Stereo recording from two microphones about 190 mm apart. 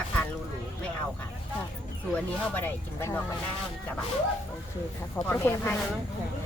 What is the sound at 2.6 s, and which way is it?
Speech, 10° left (ahead or behind).